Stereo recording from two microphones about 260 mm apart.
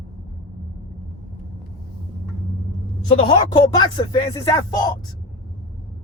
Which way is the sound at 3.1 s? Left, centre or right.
Centre.